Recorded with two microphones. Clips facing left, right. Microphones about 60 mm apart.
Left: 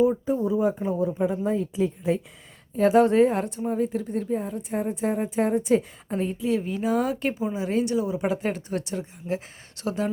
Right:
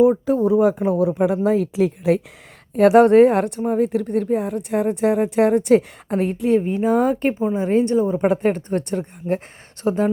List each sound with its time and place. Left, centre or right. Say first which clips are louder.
0.0 s speech: right 6 dB; right
2.7 s a woman's voice: right 7 dB; right
6.6 s a woman's voice: right 7 dB; right